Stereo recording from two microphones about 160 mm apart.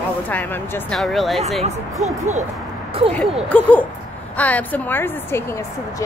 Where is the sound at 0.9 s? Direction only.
Centre (ahead or behind).